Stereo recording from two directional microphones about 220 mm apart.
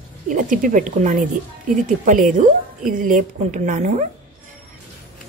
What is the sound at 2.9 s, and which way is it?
A woman's voice, 40° right (ahead or behind).